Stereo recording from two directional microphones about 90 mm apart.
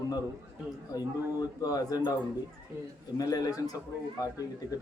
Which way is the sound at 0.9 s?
45° left (ahead or behind).